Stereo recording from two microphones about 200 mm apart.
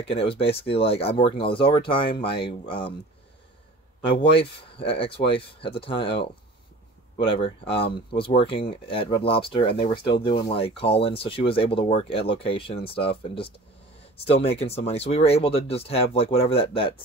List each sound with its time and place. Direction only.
0.0 s speech: 30° left (ahead or behind)
4.4 s speech: 25° left (ahead or behind)
7.2 s speech: 25° left (ahead or behind)